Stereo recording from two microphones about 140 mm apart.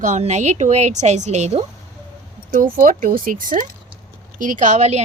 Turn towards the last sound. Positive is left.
turn(degrees=-60)  # may be behind; listen again after turning